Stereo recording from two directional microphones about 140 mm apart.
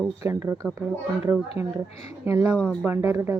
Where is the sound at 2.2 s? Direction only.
20° right (ahead or behind).